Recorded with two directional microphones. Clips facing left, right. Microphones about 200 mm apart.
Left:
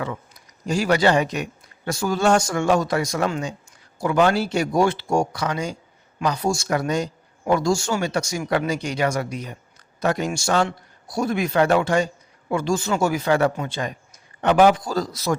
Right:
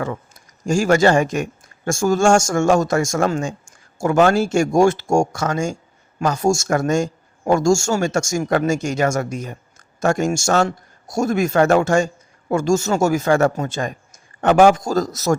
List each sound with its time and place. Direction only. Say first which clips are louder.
0.0 s speech: right 4 dB; 45° right (ahead or behind)